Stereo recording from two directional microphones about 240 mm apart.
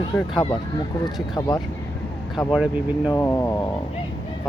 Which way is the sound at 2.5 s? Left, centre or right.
Centre.